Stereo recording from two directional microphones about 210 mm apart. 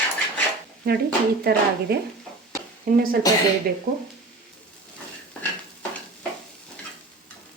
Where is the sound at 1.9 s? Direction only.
45° right (ahead or behind).